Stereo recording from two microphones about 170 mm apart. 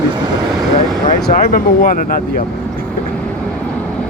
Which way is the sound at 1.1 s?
50° left (ahead or behind).